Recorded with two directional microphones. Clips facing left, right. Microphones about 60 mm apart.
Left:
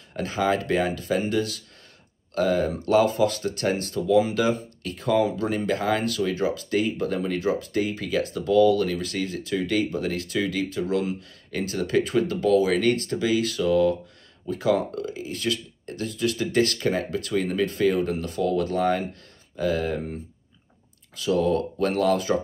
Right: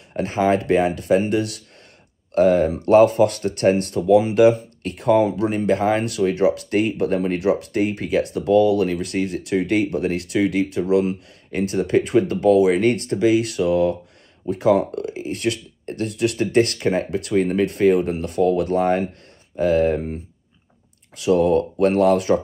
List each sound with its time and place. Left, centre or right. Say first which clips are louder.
0.1 s speech: right 5 dB; right
21.2 s speech: right 6 dB; right